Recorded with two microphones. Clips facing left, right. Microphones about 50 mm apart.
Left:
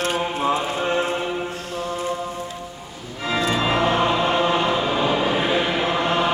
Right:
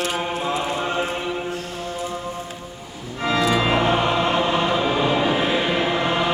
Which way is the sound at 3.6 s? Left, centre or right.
Centre.